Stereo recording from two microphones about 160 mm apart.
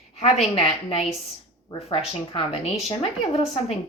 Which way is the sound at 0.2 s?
40° left (ahead or behind).